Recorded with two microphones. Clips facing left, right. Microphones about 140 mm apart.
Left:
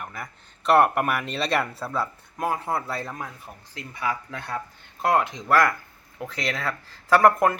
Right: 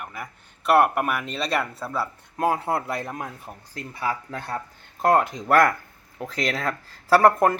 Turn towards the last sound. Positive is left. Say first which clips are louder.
# right 1 dB
turn(degrees=-30)  # may be behind; listen again after turning